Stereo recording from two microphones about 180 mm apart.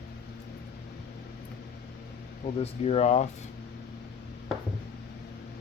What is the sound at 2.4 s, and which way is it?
Speech, 35° left (ahead or behind).